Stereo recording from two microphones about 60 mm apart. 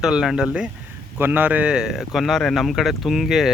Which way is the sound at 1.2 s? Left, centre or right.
Right.